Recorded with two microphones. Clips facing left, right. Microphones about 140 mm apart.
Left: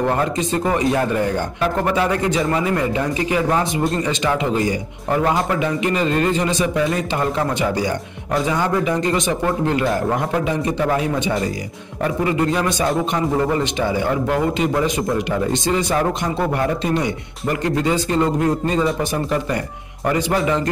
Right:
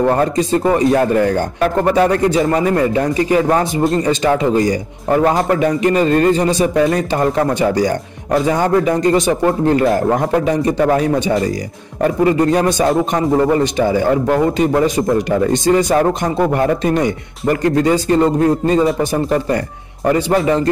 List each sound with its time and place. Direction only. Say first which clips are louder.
0.1 s speech: right 5 dB; 35° right (ahead or behind)
8.5 s a man's voice: right 5 dB; 45° right (ahead or behind)
20.2 s speech: right 4 dB; 35° right (ahead or behind)